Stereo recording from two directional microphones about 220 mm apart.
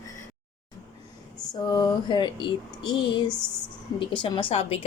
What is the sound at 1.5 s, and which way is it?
Speech, 20° left (ahead or behind).